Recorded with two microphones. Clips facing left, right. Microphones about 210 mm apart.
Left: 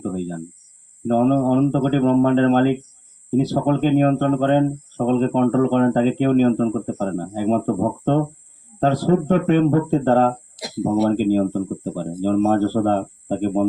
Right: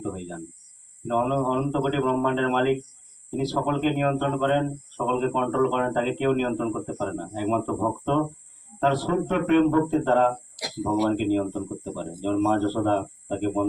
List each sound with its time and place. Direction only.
1.0 s speech: 40° left (ahead or behind)